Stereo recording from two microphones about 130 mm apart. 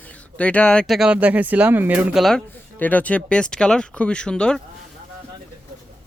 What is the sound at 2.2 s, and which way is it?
Speech, 5° left (ahead or behind).